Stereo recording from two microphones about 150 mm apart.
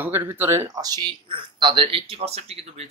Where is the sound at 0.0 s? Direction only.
15° right (ahead or behind).